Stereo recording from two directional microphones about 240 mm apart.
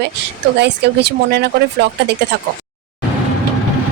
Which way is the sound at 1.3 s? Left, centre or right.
Right.